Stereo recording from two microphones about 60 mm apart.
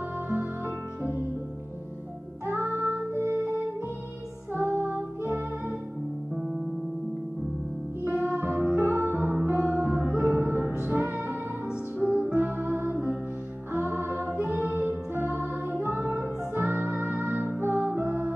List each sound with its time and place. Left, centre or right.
2.4 s music: right
4.6 s music: right
8.3 s music: right
12.0 s music: centre
12.4 s music: right